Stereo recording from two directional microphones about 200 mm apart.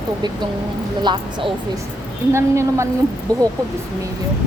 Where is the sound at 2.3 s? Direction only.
15° right (ahead or behind).